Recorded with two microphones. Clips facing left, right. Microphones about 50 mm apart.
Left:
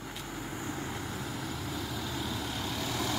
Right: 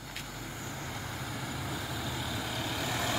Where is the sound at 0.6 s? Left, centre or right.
Centre.